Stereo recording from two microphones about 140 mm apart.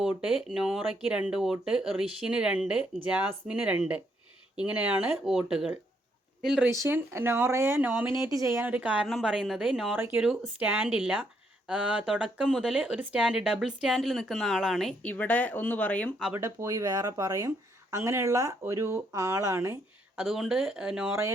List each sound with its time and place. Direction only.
0.0 s speech: 5° right (ahead or behind)
6.7 s speech: 20° right (ahead or behind); by 16.2 s 10° left (ahead or behind)
16.3 s speech: 20° right (ahead or behind)
20.1 s speech: 5° right (ahead or behind)